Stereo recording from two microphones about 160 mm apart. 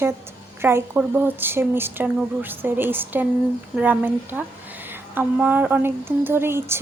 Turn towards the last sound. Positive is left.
turn(degrees=-15)  # may be behind; listen again after turning